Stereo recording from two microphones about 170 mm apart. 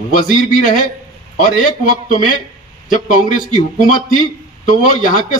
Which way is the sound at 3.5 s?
50° left (ahead or behind).